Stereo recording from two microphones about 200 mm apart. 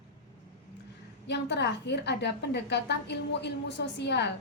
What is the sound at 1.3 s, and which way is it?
A woman's voice, 60° left (ahead or behind).